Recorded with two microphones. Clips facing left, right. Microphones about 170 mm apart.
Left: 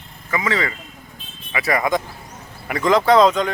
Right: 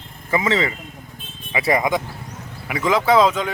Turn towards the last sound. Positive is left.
turn(degrees=-5)  # may be behind; listen again after turning